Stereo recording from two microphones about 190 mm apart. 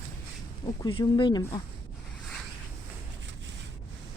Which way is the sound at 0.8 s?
25° left (ahead or behind).